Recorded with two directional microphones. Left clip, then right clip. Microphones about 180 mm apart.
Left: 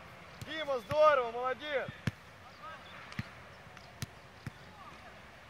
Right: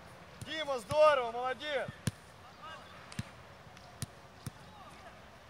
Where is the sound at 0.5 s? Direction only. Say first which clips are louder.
Even; 55° right (ahead or behind).